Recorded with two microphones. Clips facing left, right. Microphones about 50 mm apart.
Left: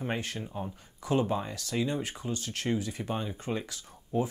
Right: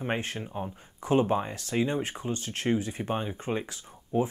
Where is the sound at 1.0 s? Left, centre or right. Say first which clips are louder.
Right 4 dB; right.